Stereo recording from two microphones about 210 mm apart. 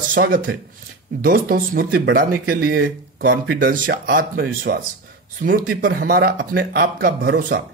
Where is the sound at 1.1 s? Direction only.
45° right (ahead or behind).